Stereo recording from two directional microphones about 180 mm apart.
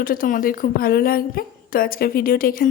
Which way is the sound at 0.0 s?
50° left (ahead or behind).